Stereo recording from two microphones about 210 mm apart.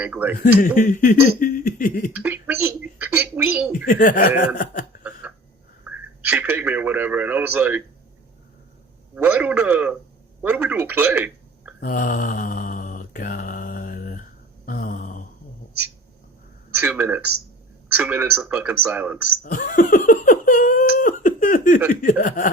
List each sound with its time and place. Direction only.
0.0 s speech: 10° right (ahead or behind)
0.8 s speech: 40° left (ahead or behind)
2.1 s a sound: 10° right (ahead or behind)
3.8 s speech: 40° left (ahead or behind)
5.2 s a sound: 5° right (ahead or behind)
6.2 s speech: 5° right (ahead or behind)
9.1 s speech: 10° right (ahead or behind)
11.8 s mantra: 40° left (ahead or behind)
16.8 s speech: 10° right (ahead or behind)
19.4 s a sound: 40° left (ahead or behind)
22.0 s speech: 40° left (ahead or behind)